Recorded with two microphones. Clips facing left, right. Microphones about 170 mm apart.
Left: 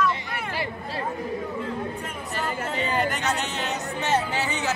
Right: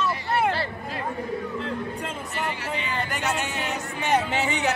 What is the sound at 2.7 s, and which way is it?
Speech, 35° left (ahead or behind).